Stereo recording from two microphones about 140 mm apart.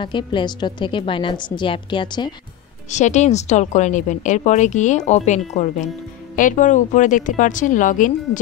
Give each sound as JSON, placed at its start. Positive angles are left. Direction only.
{"t": 0.0, "sound": "a woman's voice", "side_deg": 35}
{"t": 2.9, "sound": "a woman's voice", "side_deg": 60}
{"t": 6.3, "sound": "a woman's voice", "side_deg": 65}